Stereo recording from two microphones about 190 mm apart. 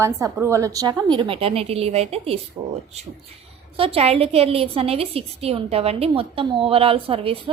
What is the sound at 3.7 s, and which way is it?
A woman's voice, 30° right (ahead or behind).